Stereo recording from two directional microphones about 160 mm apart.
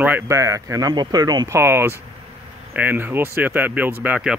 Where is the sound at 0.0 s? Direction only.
15° right (ahead or behind).